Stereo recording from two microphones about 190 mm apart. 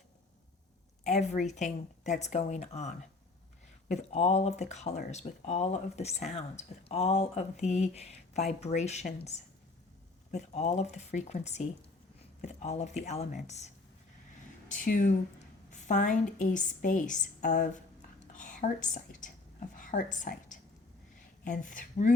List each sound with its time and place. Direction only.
1.0 s speech: 40° left (ahead or behind)
14.7 s speech: 45° left (ahead or behind)
18.3 s a sound: 40° left (ahead or behind)
21.4 s speech: 40° left (ahead or behind)